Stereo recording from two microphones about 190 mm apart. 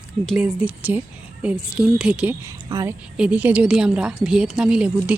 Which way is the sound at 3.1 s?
5° right (ahead or behind).